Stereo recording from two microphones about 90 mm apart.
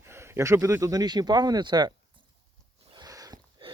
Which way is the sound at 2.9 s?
45° right (ahead or behind).